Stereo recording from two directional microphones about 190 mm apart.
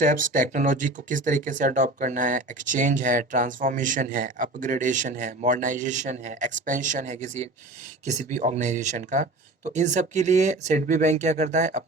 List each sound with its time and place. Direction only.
0.0 s speech: 45° right (ahead or behind)